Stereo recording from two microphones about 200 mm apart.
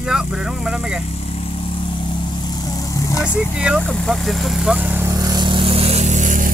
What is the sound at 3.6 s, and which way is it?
Vehicle, centre (ahead or behind).